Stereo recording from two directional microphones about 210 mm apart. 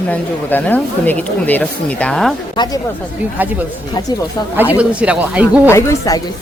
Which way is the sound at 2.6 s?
20° left (ahead or behind).